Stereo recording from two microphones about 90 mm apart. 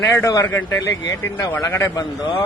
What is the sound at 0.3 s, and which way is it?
Speech, 40° left (ahead or behind).